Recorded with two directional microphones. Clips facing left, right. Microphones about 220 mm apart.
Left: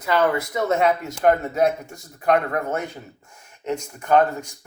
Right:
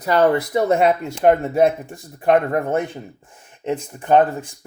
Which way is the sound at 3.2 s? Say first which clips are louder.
Right 3 dB; 30° right (ahead or behind).